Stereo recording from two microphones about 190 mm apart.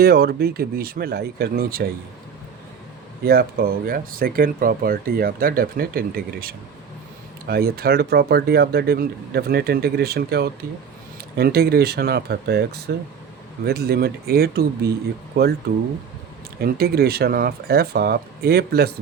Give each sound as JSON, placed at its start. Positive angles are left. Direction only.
{"t": 0.0, "sound": "speech", "side_deg": -55}
{"t": 3.2, "sound": "speech", "side_deg": -50}
{"t": 16.6, "sound": "speech", "side_deg": -55}